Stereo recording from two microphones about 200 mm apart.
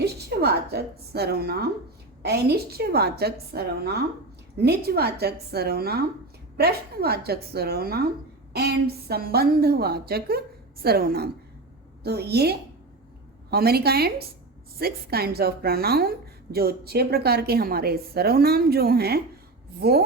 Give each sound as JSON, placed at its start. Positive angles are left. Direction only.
{"t": 0.0, "sound": "a woman's voice", "side_deg": -55}